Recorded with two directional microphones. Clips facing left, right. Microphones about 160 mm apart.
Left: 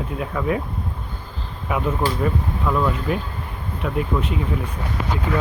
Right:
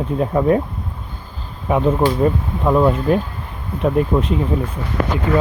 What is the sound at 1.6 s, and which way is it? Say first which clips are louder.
Speech: right 7 dB; 30° right (ahead or behind).